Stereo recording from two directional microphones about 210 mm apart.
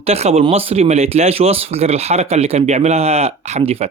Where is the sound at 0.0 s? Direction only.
30° right (ahead or behind).